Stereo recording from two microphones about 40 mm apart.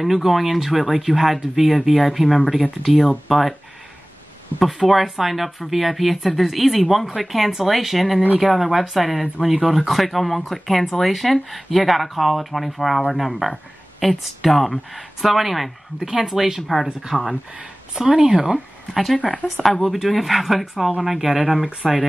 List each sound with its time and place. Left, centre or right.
0.0 s speech: centre
4.6 s speech: centre
19.1 s speech: left
19.4 s speech: centre